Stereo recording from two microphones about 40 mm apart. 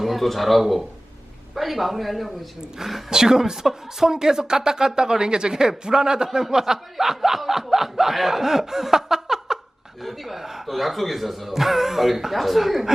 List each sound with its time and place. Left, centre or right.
0.0 s speech: centre
2.6 s speech: centre